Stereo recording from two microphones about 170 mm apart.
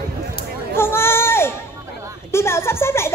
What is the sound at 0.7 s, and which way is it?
Speech, 15° left (ahead or behind).